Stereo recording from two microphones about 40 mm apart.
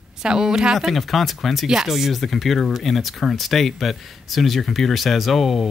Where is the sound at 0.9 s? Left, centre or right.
Centre.